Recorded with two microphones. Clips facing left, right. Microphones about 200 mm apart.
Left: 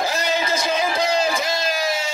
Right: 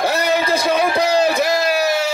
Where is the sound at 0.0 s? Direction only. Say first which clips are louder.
Right 5 dB; 65° right (ahead or behind).